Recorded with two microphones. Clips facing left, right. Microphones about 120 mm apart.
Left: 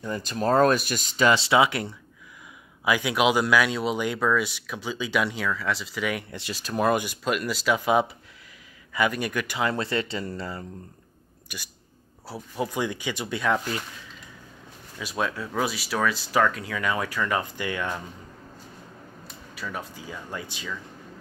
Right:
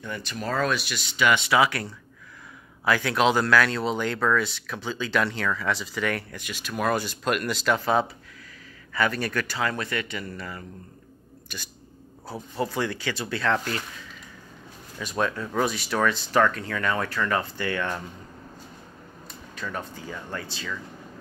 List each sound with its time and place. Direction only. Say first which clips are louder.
0.0 s speech: left 5 dB; 40° left (ahead or behind); by 6.2 s 5° left (ahead or behind)
6.3 s speech: left 3 dB; 30° left (ahead or behind)
6.8 s speech: left 2 dB; 15° left (ahead or behind)
7.2 s speech: right 1 dB; centre (ahead or behind); by 10.6 s 30° left (ahead or behind)
11.4 s speech: even; 10° left (ahead or behind)
15.0 s speech: right 2 dB; 5° left (ahead or behind)
19.2 s speech: right 1 dB; 5° left (ahead or behind)